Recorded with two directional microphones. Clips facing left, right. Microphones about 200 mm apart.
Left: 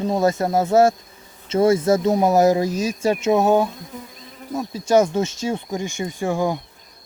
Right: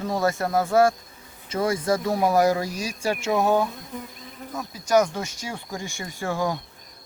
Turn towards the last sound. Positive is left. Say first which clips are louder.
# left 5 dB
turn(degrees=15)  # may be behind; listen again after turning